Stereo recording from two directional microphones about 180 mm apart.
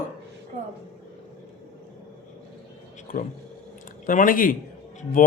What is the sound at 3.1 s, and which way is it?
A man's voice, 50° left (ahead or behind).